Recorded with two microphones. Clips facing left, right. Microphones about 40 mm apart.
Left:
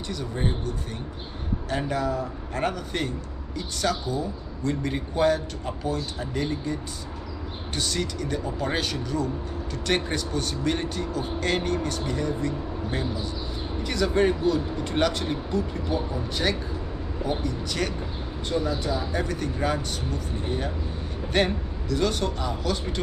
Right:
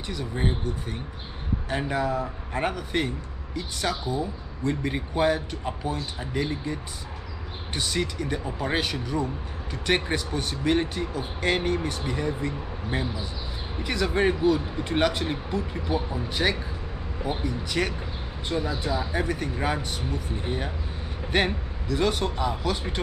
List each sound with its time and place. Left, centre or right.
0.1 s speech: centre